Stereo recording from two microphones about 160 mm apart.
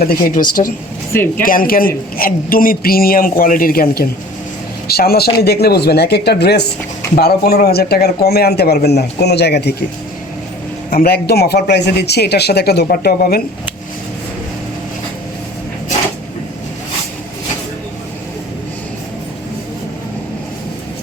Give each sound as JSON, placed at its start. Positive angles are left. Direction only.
{"t": 0.0, "sound": "a man's voice", "side_deg": 65}
{"t": 7.2, "sound": "speech", "side_deg": 80}
{"t": 10.9, "sound": "speech", "side_deg": 75}